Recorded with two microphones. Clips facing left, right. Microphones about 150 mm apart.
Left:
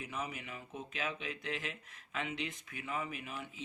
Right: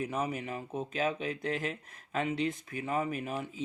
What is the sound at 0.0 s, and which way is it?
Speech, 40° right (ahead or behind).